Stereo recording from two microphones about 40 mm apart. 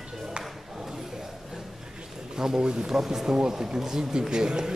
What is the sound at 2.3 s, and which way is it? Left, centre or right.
A man's voice, centre.